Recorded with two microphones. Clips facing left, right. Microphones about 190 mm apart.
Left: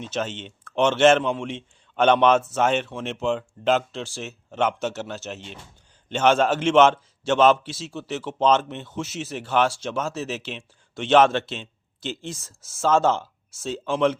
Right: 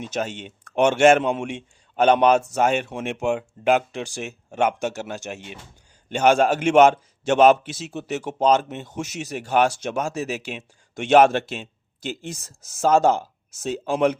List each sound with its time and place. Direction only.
0.0 s a man's voice: 10° right (ahead or behind)